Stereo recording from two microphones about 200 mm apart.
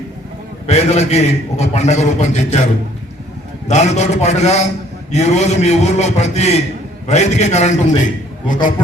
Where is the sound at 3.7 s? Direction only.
35° left (ahead or behind).